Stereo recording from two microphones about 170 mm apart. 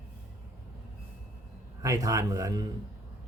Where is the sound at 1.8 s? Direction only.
20° right (ahead or behind).